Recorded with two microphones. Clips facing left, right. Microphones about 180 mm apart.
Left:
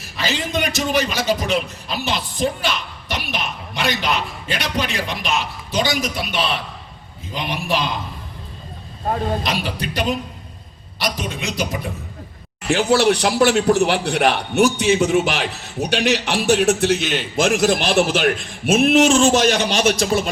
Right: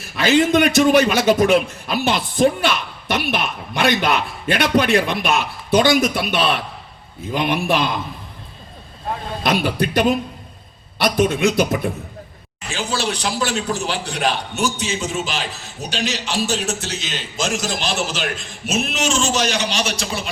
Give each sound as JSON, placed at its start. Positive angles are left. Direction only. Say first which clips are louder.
{"t": 0.2, "sound": "a man's voice", "louder": "right 8 dB", "side_deg": -55}
{"t": 9.4, "sound": "a man's voice", "louder": "right 5 dB", "side_deg": -55}
{"t": 12.6, "sound": "a man's voice", "louder": "left 8 dB", "side_deg": 65}